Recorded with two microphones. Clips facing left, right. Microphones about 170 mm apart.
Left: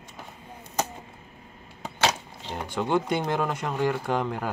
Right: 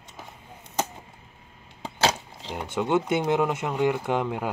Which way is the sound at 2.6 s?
20° right (ahead or behind).